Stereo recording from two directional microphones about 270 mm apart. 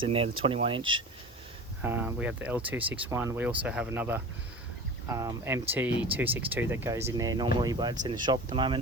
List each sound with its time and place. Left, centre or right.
0.0 s speech: centre
0.8 s speech: right
1.8 s speech: centre